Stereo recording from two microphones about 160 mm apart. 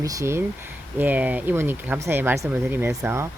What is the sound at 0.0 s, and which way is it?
Speech, 20° right (ahead or behind).